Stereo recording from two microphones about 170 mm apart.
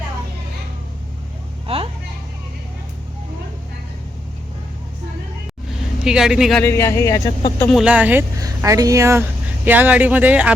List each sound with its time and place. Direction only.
1.6 s vehicle: 35° right (ahead or behind)
6.1 s speech: 5° right (ahead or behind)
6.6 s speech: 15° left (ahead or behind)
7.7 s speech: 5° right (ahead or behind)
8.4 s speech: 20° right (ahead or behind)